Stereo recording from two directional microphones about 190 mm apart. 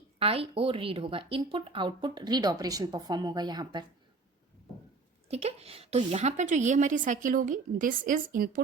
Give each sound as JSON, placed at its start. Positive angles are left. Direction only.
{"t": 0.2, "sound": "speech", "side_deg": -30}
{"t": 5.3, "sound": "a woman's voice", "side_deg": -35}